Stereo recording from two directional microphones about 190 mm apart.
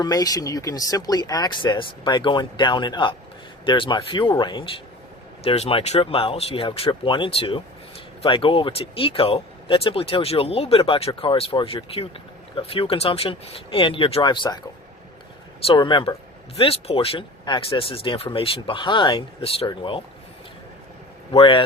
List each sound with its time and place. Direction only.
0.0 s speech: 20° left (ahead or behind)
15.6 s speech: 25° left (ahead or behind)
21.3 s speech: 25° left (ahead or behind)